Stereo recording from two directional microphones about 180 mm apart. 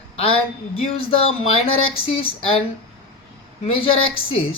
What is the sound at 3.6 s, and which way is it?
Speech, 30° left (ahead or behind).